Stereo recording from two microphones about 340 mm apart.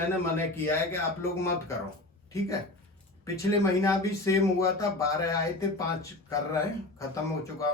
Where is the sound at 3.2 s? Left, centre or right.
Centre.